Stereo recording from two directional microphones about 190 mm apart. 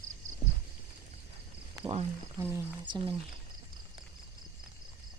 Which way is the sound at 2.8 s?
25° right (ahead or behind).